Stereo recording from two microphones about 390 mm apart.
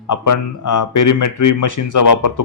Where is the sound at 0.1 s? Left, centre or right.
Left.